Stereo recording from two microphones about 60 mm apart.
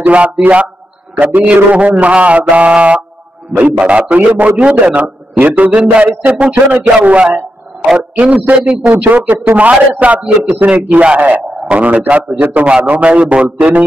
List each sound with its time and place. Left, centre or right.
0.0 s a man's voice: right